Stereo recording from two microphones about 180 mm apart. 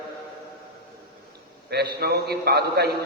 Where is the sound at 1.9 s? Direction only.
60° right (ahead or behind).